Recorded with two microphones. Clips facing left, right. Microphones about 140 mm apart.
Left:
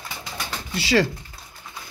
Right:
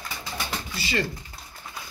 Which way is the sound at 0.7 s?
90° left.